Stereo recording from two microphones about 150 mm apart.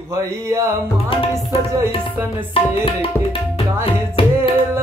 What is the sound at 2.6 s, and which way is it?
Tabla, 40° left (ahead or behind).